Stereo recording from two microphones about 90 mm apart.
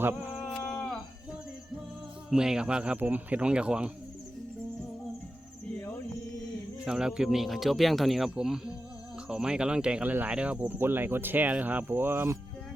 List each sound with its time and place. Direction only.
0.0 s speech: 20° right (ahead or behind)
0.3 s a sound: 5° left (ahead or behind)
2.3 s speech: 10° right (ahead or behind)
6.8 s speech: 5° right (ahead or behind); by 12.4 s 25° right (ahead or behind)